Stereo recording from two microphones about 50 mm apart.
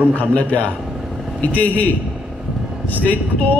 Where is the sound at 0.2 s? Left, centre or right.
Left.